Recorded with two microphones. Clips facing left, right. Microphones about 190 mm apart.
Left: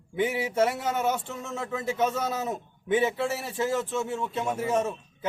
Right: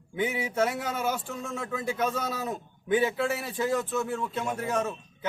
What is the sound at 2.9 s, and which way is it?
Speech, 25° left (ahead or behind).